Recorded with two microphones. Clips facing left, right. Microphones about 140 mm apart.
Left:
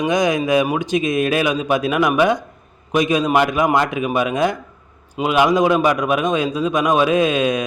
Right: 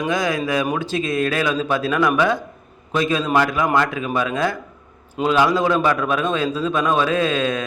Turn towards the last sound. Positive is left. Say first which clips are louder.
# left 3 dB
turn(degrees=15)  # may be behind; listen again after turning